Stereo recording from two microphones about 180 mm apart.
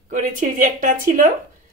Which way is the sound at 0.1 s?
50° right (ahead or behind).